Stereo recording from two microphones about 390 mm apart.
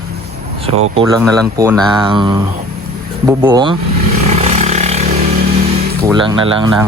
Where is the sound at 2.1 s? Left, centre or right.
Centre.